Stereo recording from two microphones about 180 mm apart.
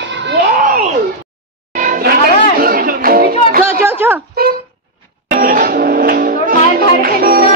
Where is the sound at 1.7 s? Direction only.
45° right (ahead or behind).